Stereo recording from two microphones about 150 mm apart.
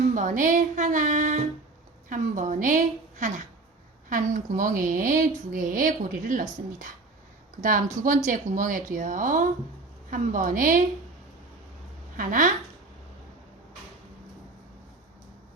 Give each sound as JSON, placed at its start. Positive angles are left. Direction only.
{"t": 0.1, "sound": "a woman's voice", "side_deg": -60}
{"t": 8.0, "sound": "a woman's voice", "side_deg": -60}
{"t": 12.1, "sound": "a woman's voice", "side_deg": -65}